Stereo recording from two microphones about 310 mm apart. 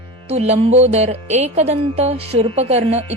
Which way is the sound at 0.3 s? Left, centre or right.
Centre.